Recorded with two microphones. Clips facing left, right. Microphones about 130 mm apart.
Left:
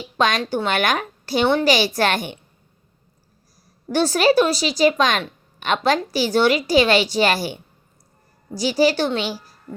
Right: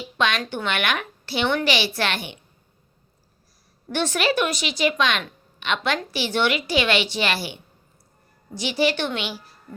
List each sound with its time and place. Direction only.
0.2 s a woman's voice: 40° left (ahead or behind)
3.9 s a woman's voice: 35° left (ahead or behind)